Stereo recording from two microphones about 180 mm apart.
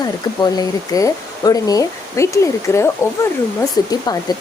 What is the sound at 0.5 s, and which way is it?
Speech, 20° left (ahead or behind).